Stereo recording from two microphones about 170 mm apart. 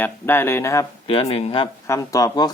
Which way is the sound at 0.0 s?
10° left (ahead or behind).